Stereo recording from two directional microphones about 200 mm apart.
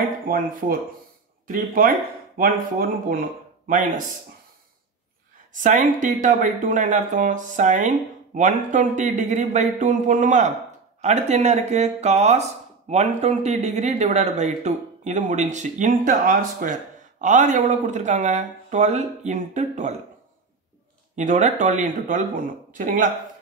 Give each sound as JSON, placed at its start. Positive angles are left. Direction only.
{"t": 0.3, "sound": "speech", "side_deg": -45}
{"t": 5.5, "sound": "speech", "side_deg": -40}
{"t": 21.2, "sound": "speech", "side_deg": -35}